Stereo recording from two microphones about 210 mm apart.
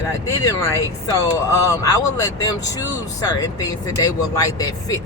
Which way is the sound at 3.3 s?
15° left (ahead or behind).